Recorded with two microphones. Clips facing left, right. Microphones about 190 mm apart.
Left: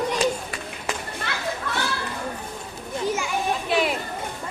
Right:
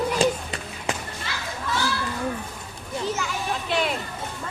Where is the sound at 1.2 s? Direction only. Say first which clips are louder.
Left 4 dB; 60° left (ahead or behind).